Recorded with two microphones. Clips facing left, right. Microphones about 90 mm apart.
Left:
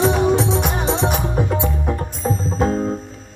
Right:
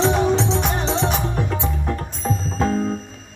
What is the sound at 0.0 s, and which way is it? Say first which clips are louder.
Music: left 2 dB; 10° left (ahead or behind).